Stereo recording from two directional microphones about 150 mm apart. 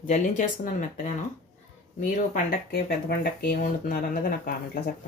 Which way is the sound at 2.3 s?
75° left (ahead or behind).